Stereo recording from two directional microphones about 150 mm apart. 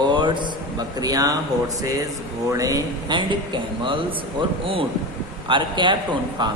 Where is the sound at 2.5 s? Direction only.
25° right (ahead or behind).